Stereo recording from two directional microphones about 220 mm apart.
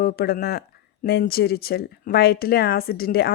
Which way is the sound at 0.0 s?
45° left (ahead or behind).